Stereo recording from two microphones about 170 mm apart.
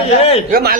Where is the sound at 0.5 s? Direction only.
60° right (ahead or behind).